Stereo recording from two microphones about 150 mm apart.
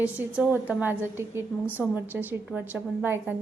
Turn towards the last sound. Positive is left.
turn(degrees=-15)  # may be behind; listen again after turning